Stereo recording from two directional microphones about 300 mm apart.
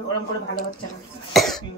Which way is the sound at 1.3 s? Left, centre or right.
Centre.